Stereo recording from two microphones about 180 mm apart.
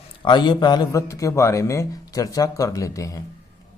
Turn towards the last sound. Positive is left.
turn(degrees=20)  # may be behind; listen again after turning